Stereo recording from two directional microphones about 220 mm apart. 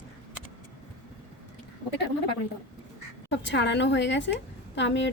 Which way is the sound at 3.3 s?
55° left (ahead or behind).